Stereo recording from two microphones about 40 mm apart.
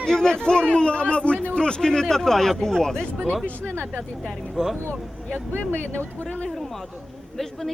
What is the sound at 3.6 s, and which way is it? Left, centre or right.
Speech, right.